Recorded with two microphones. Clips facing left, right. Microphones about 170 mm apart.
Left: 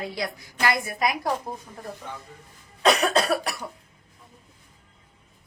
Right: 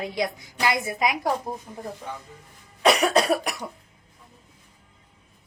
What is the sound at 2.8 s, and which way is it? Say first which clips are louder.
Cough: right 1 dB; 15° right (ahead or behind).